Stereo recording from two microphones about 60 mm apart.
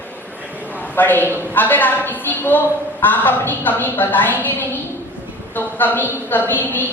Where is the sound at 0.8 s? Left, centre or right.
Left.